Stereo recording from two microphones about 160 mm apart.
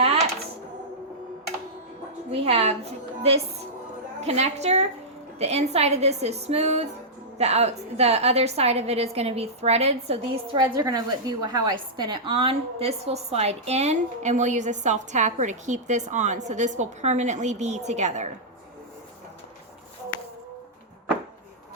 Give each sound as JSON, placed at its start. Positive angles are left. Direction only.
{"t": 0.0, "sound": "a sound", "side_deg": -40}
{"t": 2.3, "sound": "a woman's voice", "side_deg": -35}
{"t": 4.2, "sound": "a woman's voice", "side_deg": -40}